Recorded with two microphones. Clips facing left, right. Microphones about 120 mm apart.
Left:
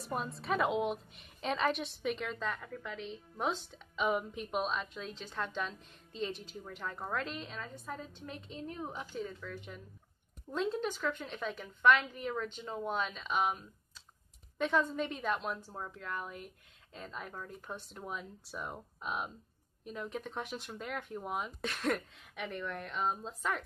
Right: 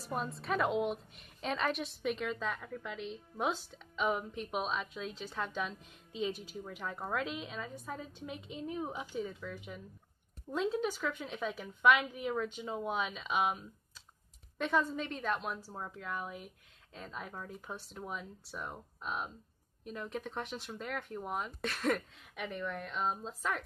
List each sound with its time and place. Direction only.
0.0 s a woman's voice: centre (ahead or behind)